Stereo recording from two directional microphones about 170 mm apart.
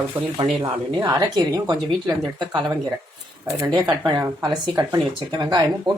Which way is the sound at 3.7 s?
25° right (ahead or behind).